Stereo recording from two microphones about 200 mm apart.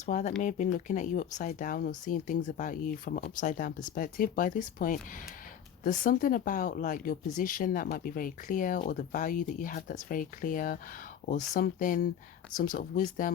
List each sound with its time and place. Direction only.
0.0 s speech: 40° left (ahead or behind)